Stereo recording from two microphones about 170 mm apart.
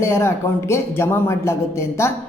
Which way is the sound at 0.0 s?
15° left (ahead or behind).